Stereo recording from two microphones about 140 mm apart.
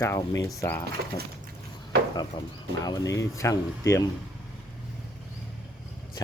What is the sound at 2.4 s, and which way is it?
Speech, 35° left (ahead or behind).